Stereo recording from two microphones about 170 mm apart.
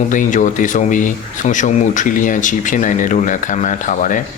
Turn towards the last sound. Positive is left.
turn(degrees=50)  # may be behind; listen again after turning